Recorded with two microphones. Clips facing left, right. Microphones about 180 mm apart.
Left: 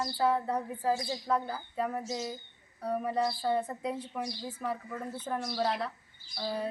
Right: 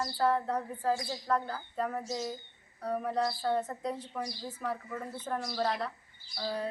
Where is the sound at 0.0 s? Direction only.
10° left (ahead or behind).